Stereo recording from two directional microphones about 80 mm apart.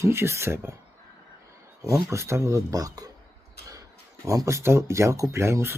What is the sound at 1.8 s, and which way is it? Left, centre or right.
Speech, right.